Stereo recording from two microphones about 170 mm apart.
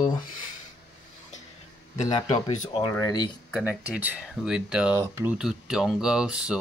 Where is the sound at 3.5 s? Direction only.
5° right (ahead or behind).